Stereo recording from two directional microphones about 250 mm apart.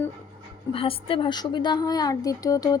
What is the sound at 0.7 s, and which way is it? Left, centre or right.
A woman's voice, left.